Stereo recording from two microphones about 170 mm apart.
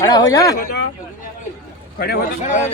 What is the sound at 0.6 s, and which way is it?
Speech, 60° left (ahead or behind).